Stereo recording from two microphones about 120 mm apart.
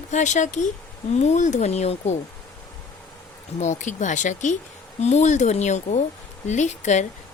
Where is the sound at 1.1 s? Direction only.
75° left (ahead or behind).